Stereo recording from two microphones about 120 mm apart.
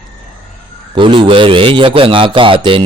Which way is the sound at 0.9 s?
40° right (ahead or behind).